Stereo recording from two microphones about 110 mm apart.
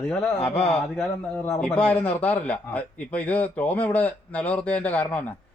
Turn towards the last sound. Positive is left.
turn(degrees=15)  # may be behind; listen again after turning